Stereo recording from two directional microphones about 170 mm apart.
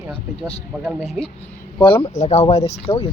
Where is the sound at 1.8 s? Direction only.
30° left (ahead or behind).